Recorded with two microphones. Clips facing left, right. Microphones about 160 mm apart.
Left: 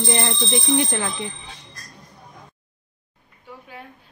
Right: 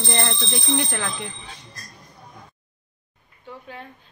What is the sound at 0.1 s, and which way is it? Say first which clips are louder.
Speech: left 2 dB; 15° left (ahead or behind).